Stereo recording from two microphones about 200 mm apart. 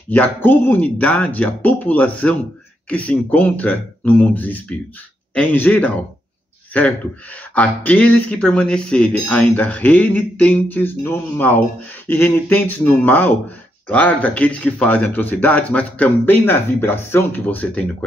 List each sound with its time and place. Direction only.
0.1 s speech: 10° left (ahead or behind)
7.5 s speech: 10° left (ahead or behind)